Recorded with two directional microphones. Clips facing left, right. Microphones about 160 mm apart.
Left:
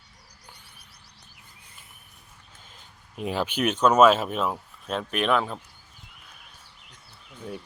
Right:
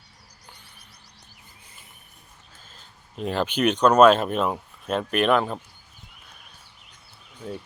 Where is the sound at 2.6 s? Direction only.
15° left (ahead or behind); by 5.5 s centre (ahead or behind).